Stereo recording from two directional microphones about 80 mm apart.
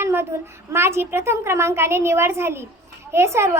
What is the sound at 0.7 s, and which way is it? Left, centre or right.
A child's voice, right.